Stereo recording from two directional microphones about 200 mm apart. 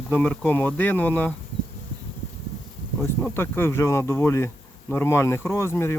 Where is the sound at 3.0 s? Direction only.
10° left (ahead or behind).